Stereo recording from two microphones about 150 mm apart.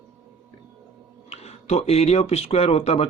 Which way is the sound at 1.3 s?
45° left (ahead or behind).